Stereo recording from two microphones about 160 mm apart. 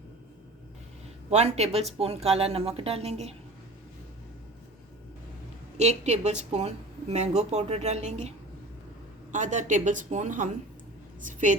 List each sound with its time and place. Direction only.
1.3 s speech: 40° right (ahead or behind)
5.7 s a woman's voice: 45° right (ahead or behind)
9.3 s a woman's voice: 50° right (ahead or behind)